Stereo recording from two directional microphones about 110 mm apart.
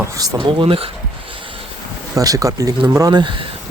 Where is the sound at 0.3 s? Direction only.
50° right (ahead or behind).